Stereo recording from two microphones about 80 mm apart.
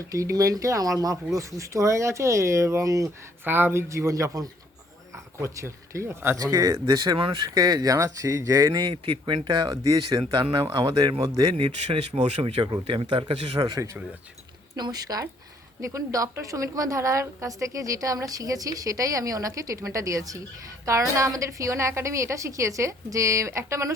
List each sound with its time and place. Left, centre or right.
0.1 s speech: right
3.4 s speech: right
6.4 s a woman's voice: right
8.8 s speech: right
9.6 s a woman's voice: right
10.3 s speech: right
10.8 s speech: right
12.5 s speech: right
13.7 s speech: right
14.8 s a woman's voice: right
15.8 s a woman's voice: right